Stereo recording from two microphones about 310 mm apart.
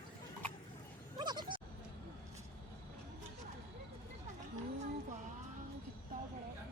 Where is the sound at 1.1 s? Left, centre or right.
Centre.